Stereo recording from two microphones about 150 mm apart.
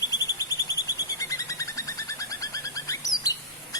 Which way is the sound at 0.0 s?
25° left (ahead or behind).